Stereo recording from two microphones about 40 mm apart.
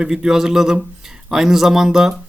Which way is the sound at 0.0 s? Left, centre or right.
Centre.